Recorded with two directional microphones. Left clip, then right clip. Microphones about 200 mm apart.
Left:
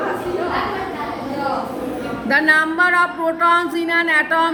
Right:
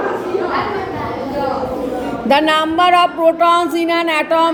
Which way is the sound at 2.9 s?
15° right (ahead or behind).